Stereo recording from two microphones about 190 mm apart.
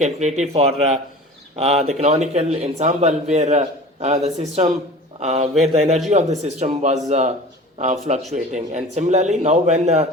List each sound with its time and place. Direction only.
0.0 s a man's voice: 35° right (ahead or behind)